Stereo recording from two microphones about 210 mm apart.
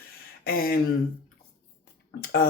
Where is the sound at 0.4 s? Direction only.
45° left (ahead or behind).